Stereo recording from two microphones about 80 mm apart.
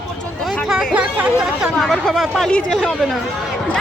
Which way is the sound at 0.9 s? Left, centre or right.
Centre.